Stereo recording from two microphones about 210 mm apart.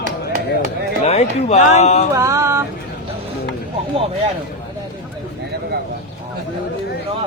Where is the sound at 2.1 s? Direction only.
15° right (ahead or behind).